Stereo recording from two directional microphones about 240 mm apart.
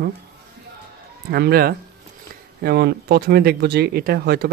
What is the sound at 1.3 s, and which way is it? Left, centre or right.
Speech, right.